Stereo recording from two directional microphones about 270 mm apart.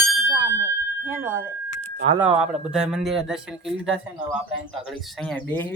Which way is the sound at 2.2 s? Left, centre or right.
Centre.